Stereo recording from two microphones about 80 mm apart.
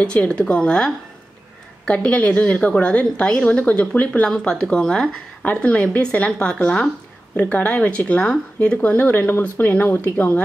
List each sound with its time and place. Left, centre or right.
0.0 s a woman's voice: centre